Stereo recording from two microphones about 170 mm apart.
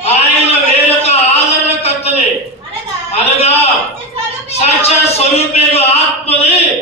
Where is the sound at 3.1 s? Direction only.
40° left (ahead or behind).